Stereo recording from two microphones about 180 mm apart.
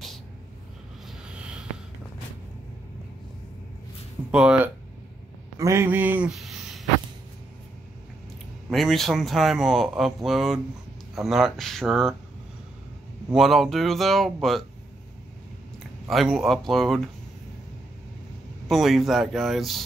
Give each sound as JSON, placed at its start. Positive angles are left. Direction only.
{"t": 1.0, "sound": "a sound", "side_deg": -5}
{"t": 4.3, "sound": "speech", "side_deg": -5}
{"t": 8.6, "sound": "speech", "side_deg": 0}
{"t": 13.3, "sound": "speech", "side_deg": 0}
{"t": 16.1, "sound": "speech", "side_deg": 0}
{"t": 18.7, "sound": "speech", "side_deg": 0}